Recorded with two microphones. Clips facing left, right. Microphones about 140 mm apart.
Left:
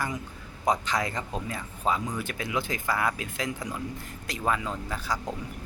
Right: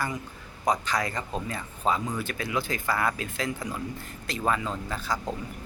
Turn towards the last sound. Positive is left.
turn(degrees=10)  # may be behind; listen again after turning